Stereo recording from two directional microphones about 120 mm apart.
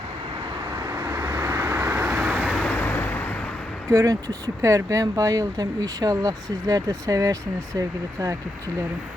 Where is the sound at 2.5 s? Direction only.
5° left (ahead or behind).